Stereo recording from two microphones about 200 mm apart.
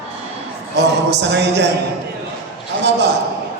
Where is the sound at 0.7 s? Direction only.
60° right (ahead or behind).